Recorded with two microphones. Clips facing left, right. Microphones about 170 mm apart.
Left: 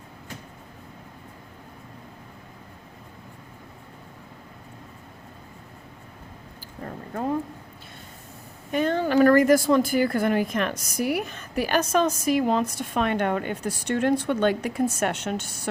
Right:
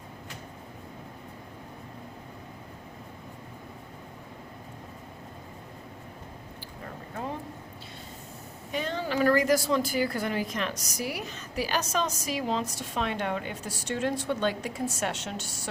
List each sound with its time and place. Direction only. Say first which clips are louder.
8.7 s speech: left 8 dB; 55° left (ahead or behind)